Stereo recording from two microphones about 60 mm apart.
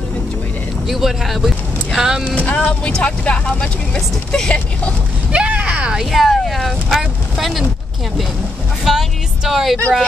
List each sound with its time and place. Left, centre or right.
0.8 s speech: centre
2.3 s speech: left
5.3 s a sound: centre
5.9 s speech: centre
8.8 s speech: centre